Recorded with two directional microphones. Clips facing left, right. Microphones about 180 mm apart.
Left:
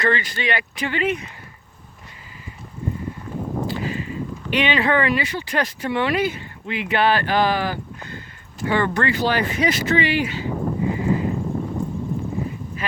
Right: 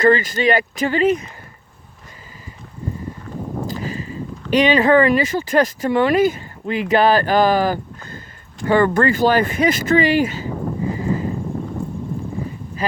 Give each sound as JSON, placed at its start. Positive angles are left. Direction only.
{"t": 0.0, "sound": "speech", "side_deg": -45}
{"t": 3.7, "sound": "speech", "side_deg": -40}